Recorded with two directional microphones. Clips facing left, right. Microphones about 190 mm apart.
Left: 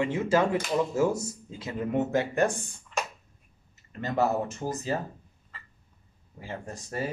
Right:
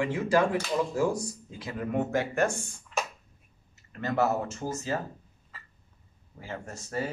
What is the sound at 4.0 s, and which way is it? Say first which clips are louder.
Speech: even; 15° left (ahead or behind).